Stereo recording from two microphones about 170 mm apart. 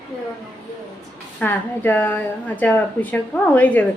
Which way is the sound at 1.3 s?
10° left (ahead or behind).